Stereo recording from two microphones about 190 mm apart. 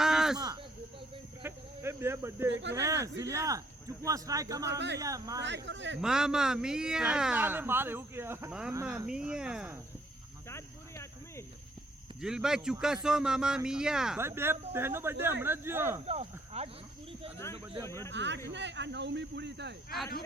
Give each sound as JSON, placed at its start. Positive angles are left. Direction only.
{"t": 0.0, "sound": "a sound", "side_deg": -5}
{"t": 0.3, "sound": "a sound", "side_deg": -20}
{"t": 2.5, "sound": "speech", "side_deg": -75}
{"t": 2.7, "sound": "speech", "side_deg": -15}
{"t": 5.6, "sound": "speech", "side_deg": -70}
{"t": 6.0, "sound": "a man's voice", "side_deg": -5}
{"t": 10.5, "sound": "a sound", "side_deg": 15}
{"t": 12.2, "sound": "a man's voice", "side_deg": -5}
{"t": 16.0, "sound": "speech", "side_deg": -35}
{"t": 17.8, "sound": "speech", "side_deg": 15}
{"t": 18.1, "sound": "speech", "side_deg": -70}